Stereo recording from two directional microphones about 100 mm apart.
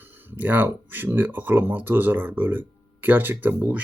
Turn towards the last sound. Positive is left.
turn(degrees=-15)  # may be behind; listen again after turning